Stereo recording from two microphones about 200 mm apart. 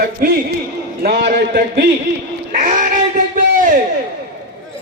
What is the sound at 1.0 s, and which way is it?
Speech, 50° right (ahead or behind).